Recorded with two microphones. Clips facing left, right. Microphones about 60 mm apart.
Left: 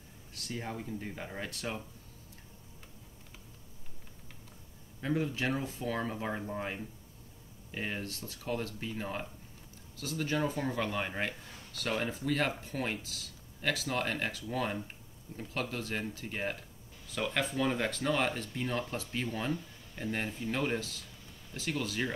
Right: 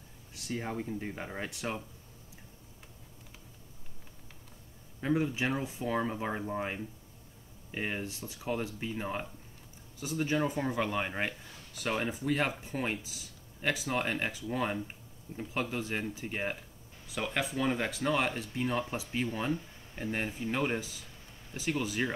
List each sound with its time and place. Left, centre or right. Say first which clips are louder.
0.3 s speech: right 3 dB; centre
5.0 s speech: right 2 dB; centre